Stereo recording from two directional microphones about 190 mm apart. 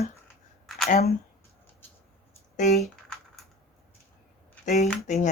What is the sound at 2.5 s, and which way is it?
Speech, 40° left (ahead or behind).